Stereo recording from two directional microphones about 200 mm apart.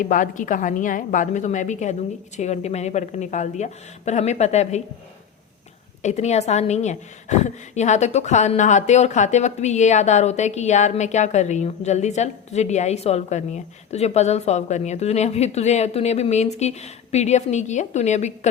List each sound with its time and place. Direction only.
0.0 s a woman's voice: 40° left (ahead or behind)
6.0 s a woman's voice: 35° left (ahead or behind)